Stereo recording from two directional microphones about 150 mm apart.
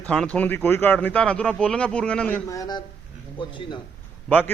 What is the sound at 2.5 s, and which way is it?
A man's voice, 25° left (ahead or behind).